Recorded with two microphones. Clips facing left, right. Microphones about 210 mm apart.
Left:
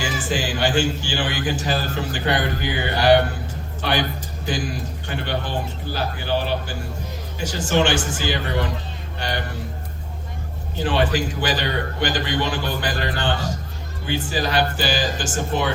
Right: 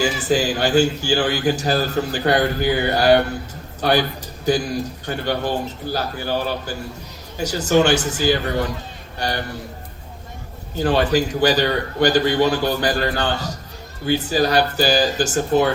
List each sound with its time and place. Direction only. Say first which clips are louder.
0.0 s a man's voice: right 6 dB; 40° right (ahead or behind)
5.0 s a man's voice: right 3 dB; 40° right (ahead or behind)
10.8 s a man's voice: right 4 dB; 40° right (ahead or behind)